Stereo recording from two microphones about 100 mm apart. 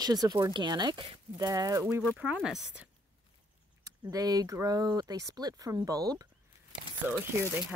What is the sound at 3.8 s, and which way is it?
Speech, 40° right (ahead or behind).